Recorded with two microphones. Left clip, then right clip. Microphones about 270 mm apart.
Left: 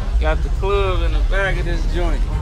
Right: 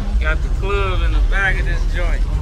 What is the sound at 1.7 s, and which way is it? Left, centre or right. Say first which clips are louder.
Speech: left 1 dB; centre.